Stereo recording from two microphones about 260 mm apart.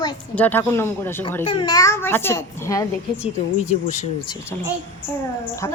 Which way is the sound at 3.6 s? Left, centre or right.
Left.